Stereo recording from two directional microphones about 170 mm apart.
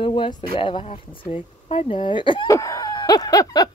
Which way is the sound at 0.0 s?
30° left (ahead or behind).